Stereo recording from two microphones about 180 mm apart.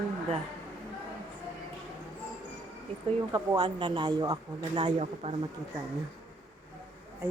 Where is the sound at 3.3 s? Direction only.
20° right (ahead or behind).